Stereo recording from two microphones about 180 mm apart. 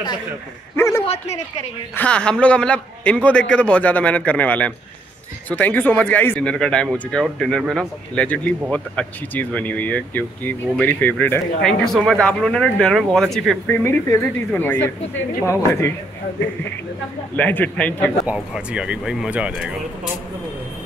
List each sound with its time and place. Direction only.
0.7 s a sound: 15° left (ahead or behind)
1.0 s speech: 35° left (ahead or behind)
2.0 s speech: 5° left (ahead or behind)
17.4 s speech: 10° left (ahead or behind)
18.2 s speech: 5° right (ahead or behind)